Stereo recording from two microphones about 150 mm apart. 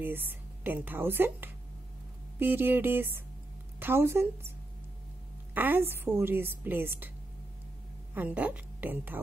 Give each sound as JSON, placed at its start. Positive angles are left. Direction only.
{"t": 0.0, "sound": "a woman's voice", "side_deg": -15}
{"t": 5.5, "sound": "a woman's voice", "side_deg": -15}
{"t": 8.1, "sound": "a woman's voice", "side_deg": -10}